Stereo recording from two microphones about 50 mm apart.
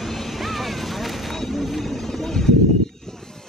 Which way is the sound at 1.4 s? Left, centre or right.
Centre.